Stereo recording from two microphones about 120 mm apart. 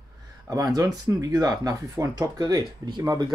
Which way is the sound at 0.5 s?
30° right (ahead or behind).